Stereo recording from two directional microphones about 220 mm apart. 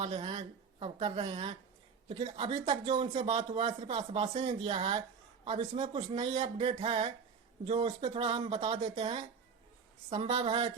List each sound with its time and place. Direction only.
0.0 s speech: 25° right (ahead or behind)